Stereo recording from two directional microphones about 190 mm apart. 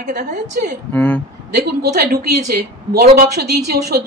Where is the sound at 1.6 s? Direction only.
55° right (ahead or behind).